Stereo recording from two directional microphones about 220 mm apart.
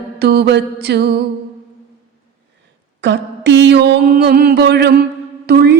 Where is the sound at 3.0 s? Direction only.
50° right (ahead or behind).